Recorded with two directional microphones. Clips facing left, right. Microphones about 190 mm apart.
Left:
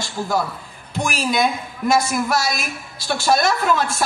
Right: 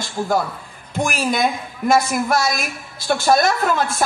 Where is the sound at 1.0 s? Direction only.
50° right (ahead or behind).